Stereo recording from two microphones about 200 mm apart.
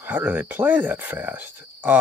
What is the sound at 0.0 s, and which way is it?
Speech, 10° right (ahead or behind).